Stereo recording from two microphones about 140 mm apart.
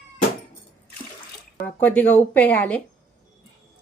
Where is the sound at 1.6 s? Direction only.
10° left (ahead or behind).